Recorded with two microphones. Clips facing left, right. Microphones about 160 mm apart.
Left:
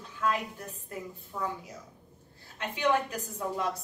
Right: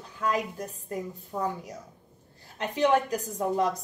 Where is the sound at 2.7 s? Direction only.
35° right (ahead or behind).